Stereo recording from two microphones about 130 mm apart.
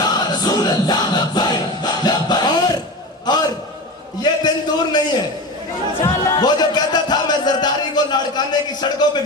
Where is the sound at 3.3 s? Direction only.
35° left (ahead or behind).